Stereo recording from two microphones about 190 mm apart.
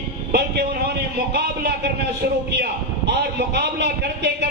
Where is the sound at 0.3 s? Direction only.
60° right (ahead or behind).